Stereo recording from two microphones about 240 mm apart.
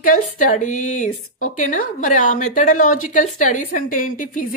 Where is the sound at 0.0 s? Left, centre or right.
Left.